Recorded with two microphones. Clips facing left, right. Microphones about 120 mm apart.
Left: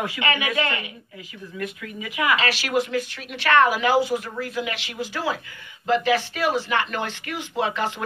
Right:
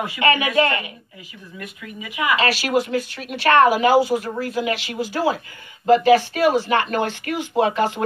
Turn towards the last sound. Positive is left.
turn(degrees=-45)  # may be behind; listen again after turning